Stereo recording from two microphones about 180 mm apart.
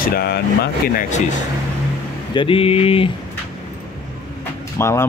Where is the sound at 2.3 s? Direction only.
30° left (ahead or behind).